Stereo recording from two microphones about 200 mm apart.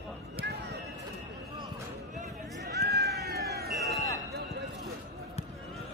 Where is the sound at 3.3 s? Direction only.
55° right (ahead or behind).